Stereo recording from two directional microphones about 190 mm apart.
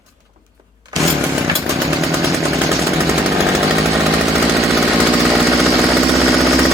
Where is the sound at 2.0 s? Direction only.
15° right (ahead or behind).